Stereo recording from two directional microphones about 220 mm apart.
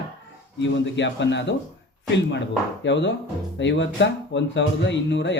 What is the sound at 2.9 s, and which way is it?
Speech, 55° left (ahead or behind).